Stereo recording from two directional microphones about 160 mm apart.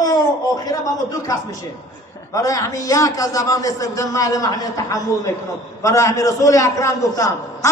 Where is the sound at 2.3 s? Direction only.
20° left (ahead or behind).